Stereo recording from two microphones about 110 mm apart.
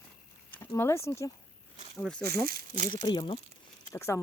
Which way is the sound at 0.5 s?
25° left (ahead or behind).